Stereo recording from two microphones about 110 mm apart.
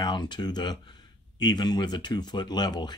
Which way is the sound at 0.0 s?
40° left (ahead or behind).